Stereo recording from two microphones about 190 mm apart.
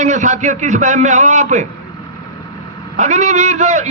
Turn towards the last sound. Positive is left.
turn(degrees=-35)  # may be behind; listen again after turning